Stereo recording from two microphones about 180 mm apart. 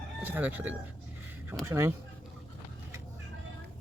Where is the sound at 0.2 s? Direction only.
10° right (ahead or behind).